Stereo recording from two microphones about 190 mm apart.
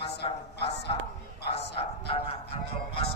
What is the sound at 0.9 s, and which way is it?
A man's voice, 30° left (ahead or behind).